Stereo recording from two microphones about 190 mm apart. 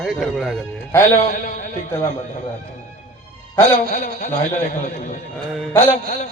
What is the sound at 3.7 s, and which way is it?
A man's voice, 35° left (ahead or behind).